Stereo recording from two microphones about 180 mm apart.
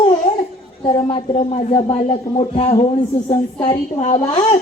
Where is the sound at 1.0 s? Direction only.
30° left (ahead or behind).